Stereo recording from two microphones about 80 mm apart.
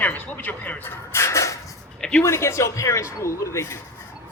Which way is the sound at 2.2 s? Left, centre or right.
Left.